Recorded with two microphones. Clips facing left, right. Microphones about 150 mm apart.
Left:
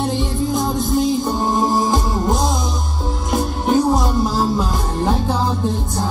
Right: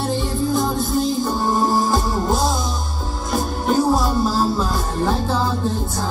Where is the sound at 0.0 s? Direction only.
20° left (ahead or behind).